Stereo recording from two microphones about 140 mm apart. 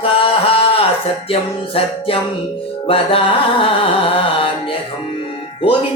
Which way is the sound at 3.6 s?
40° left (ahead or behind).